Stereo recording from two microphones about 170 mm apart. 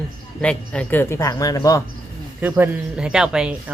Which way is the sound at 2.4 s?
10° right (ahead or behind).